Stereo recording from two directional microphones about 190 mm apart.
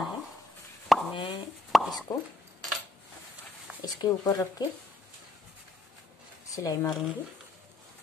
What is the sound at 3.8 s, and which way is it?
Speech, 20° left (ahead or behind).